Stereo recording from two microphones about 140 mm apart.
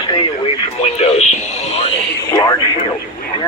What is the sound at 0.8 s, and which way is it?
Speech, 50° left (ahead or behind).